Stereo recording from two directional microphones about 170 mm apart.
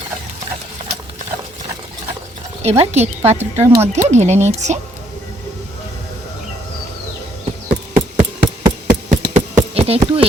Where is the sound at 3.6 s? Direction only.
15° right (ahead or behind).